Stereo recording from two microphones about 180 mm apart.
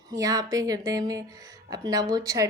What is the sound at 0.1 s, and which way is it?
A woman's voice, 20° right (ahead or behind).